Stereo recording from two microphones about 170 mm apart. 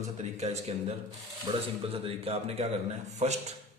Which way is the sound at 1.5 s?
30° right (ahead or behind).